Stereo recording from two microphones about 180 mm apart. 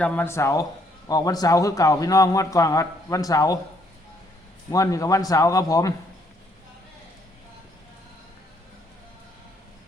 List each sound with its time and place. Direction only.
0.0 s a man's voice: 10° left (ahead or behind)
4.7 s a man's voice: 20° left (ahead or behind)